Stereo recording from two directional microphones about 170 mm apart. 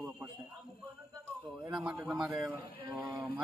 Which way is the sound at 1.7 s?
5° right (ahead or behind).